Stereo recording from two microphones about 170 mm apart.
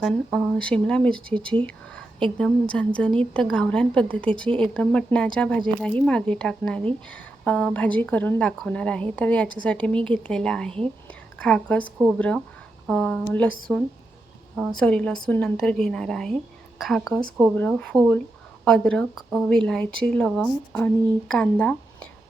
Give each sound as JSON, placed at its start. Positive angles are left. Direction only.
{"t": 0.0, "sound": "a woman's voice", "side_deg": 5}
{"t": 12.0, "sound": "a woman's voice", "side_deg": -5}